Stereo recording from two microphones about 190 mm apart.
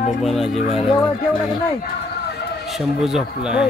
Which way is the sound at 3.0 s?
5° right (ahead or behind).